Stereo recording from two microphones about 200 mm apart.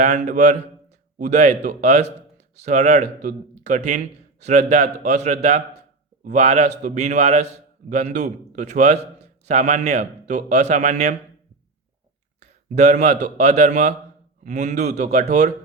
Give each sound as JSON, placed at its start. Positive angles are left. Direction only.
{"t": 0.0, "sound": "a man's voice", "side_deg": -40}
{"t": 12.4, "sound": "a man's voice", "side_deg": -35}